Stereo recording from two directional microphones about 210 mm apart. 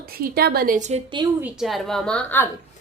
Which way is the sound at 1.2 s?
10° right (ahead or behind).